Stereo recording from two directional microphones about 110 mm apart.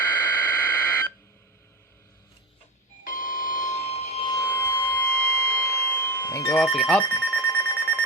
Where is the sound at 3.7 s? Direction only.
80° left.